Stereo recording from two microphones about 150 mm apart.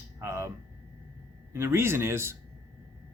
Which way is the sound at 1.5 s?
15° right (ahead or behind).